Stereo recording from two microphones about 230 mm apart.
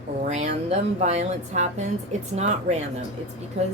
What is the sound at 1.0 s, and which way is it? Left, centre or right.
A woman's voice, right.